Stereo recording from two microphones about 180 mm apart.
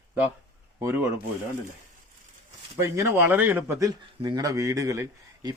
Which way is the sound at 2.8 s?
15° right (ahead or behind).